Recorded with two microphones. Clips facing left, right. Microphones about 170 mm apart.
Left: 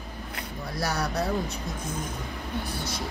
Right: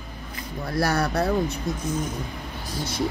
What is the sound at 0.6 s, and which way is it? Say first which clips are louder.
Speech: right 6 dB; 60° right (ahead or behind).